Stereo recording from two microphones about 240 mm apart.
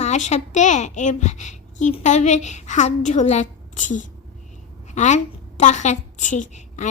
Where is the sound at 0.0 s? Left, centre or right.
Left.